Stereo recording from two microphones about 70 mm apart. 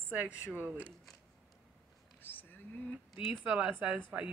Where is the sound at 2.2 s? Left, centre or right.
Left.